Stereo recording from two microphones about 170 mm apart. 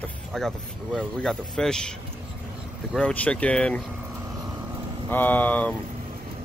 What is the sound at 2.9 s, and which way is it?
Speech, 5° left (ahead or behind).